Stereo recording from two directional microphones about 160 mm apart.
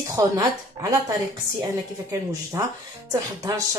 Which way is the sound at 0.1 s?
20° right (ahead or behind).